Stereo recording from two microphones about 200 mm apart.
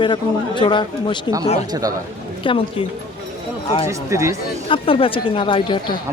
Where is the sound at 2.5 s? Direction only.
25° left (ahead or behind).